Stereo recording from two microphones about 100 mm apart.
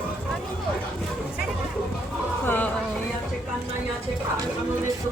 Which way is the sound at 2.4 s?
20° left (ahead or behind).